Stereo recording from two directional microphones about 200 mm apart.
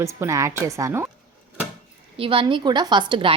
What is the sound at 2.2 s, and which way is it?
A woman's voice, 25° right (ahead or behind).